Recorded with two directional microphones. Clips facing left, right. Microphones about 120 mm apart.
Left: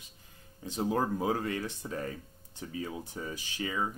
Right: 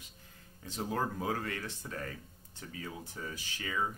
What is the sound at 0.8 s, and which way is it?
Speech, 20° left (ahead or behind).